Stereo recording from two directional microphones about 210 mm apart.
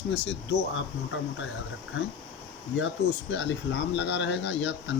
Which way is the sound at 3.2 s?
55° left (ahead or behind).